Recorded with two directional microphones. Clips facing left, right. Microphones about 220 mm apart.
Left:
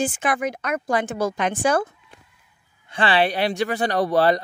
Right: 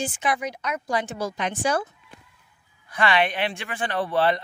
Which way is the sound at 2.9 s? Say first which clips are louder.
Left 2 dB; 30° left (ahead or behind).